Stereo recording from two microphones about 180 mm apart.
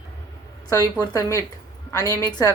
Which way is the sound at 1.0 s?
15° left (ahead or behind).